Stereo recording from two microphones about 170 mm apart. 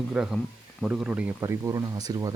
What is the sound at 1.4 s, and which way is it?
Speech, 15° right (ahead or behind).